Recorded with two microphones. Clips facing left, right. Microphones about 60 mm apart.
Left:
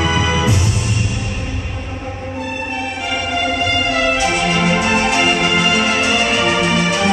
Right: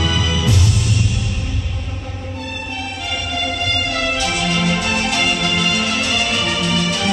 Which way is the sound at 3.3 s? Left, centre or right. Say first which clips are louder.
Left 4 dB; left.